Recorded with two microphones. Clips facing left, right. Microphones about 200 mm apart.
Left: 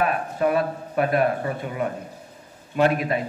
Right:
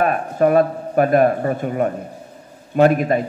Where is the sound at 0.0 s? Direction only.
45° right (ahead or behind).